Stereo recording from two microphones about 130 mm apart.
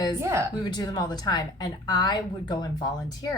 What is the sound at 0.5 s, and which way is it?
A woman's voice, 30° left (ahead or behind).